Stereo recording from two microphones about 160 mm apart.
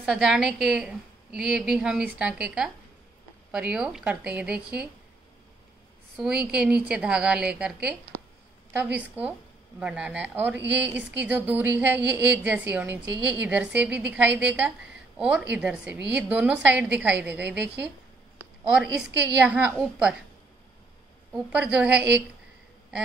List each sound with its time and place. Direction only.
0.0 s a woman's voice: 5° right (ahead or behind)
6.1 s a woman's voice: 5° right (ahead or behind)
10.5 s speech: 90° right
10.8 s a woman's voice: 10° right (ahead or behind)
21.3 s a woman's voice: 5° right (ahead or behind)